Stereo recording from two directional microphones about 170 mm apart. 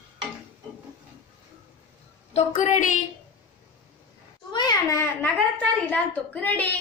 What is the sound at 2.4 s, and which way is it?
Speech, 45° left (ahead or behind).